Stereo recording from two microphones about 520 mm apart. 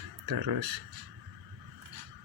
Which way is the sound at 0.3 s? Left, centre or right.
Right.